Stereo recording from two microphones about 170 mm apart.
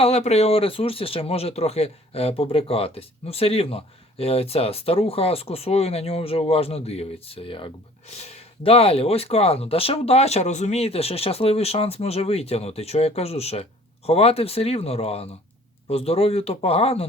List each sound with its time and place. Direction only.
0.0 s speech: 40° left (ahead or behind)